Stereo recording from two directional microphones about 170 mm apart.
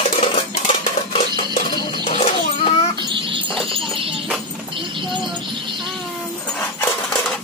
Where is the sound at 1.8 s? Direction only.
30° left (ahead or behind).